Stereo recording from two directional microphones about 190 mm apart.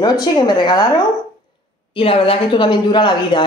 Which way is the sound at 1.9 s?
30° left (ahead or behind).